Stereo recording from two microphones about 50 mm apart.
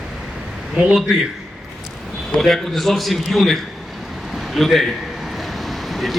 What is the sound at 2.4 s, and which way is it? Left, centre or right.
A man's voice, centre.